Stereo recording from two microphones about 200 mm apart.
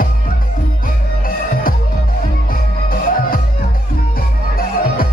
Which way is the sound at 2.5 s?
45° left (ahead or behind).